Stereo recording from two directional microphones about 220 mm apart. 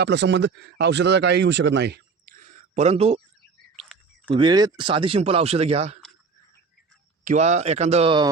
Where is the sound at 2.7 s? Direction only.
30° right (ahead or behind).